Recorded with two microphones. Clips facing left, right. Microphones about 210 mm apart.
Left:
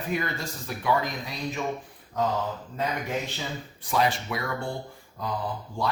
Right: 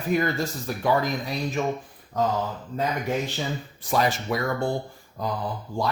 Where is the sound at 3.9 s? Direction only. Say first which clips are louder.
Right 2 dB; 40° right (ahead or behind).